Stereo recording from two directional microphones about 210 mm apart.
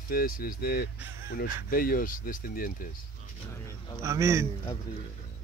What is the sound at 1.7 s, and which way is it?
Speech, 40° left (ahead or behind).